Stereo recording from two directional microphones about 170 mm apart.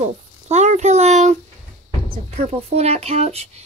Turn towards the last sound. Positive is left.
turn(degrees=-40)  # may be behind; listen again after turning